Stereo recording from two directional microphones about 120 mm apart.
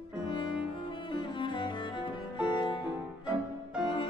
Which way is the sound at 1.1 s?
40° left (ahead or behind).